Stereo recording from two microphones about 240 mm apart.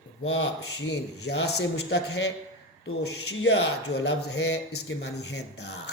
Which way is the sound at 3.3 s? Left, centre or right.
Left.